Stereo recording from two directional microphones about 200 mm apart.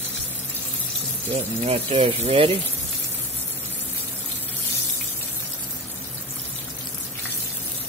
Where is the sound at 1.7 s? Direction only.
30° right (ahead or behind).